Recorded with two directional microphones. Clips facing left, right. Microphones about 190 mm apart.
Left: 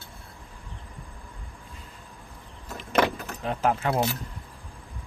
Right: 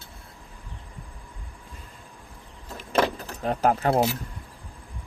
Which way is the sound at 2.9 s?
30° right (ahead or behind).